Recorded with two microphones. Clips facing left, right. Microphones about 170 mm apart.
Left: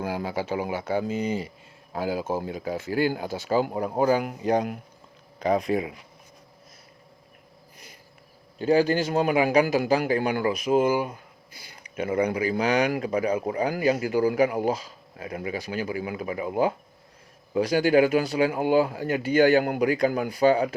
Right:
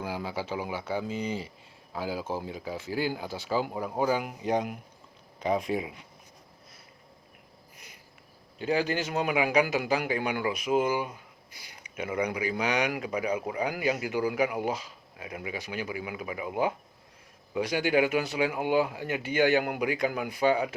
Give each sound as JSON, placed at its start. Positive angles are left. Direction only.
{"t": 0.0, "sound": "speech", "side_deg": 50}
{"t": 5.6, "sound": "speech", "side_deg": 80}
{"t": 8.5, "sound": "speech", "side_deg": 35}
{"t": 11.5, "sound": "speech", "side_deg": 35}